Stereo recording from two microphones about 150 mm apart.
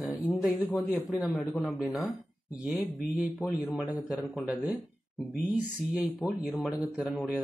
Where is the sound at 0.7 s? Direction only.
10° left (ahead or behind).